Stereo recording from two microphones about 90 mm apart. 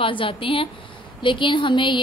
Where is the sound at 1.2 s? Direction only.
65° left (ahead or behind).